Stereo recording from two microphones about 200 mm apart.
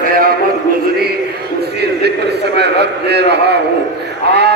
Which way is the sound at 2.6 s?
55° right (ahead or behind).